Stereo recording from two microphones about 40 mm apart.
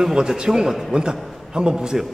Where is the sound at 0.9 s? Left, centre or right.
Right.